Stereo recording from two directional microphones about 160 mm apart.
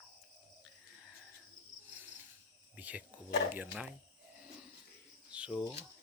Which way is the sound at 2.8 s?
10° right (ahead or behind).